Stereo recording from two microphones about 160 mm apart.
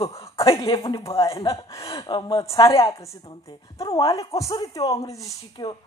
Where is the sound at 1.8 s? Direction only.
30° left (ahead or behind).